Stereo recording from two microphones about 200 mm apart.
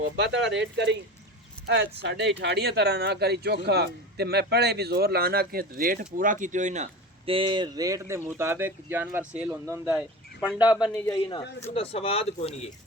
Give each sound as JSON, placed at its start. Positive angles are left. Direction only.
{"t": 0.0, "sound": "speech", "side_deg": -60}
{"t": 7.3, "sound": "speech", "side_deg": -25}
{"t": 11.2, "sound": "speech", "side_deg": 20}